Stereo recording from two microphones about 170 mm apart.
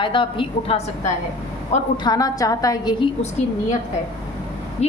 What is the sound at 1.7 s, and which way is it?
Speech, 40° left (ahead or behind).